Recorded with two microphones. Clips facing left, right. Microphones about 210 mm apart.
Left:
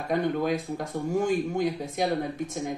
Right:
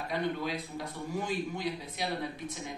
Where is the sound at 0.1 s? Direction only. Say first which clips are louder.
Left 8 dB; 50° left (ahead or behind).